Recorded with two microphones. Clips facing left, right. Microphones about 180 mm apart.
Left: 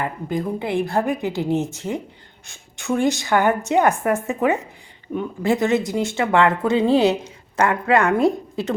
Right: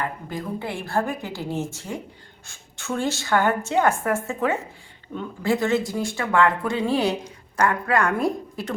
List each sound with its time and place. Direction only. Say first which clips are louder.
0.0 s a woman's voice: left 5 dB; 20° left (ahead or behind)